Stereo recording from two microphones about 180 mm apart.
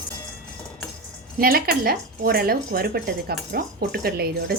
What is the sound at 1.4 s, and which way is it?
Speech, 55° right (ahead or behind).